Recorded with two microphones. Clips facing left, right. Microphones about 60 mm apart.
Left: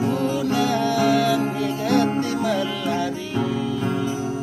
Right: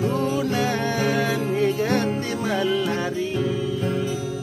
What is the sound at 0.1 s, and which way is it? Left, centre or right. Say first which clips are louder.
Music: left 1 dB; right.